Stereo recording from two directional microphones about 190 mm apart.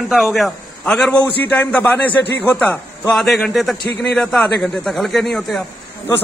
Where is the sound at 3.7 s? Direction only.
55° left (ahead or behind).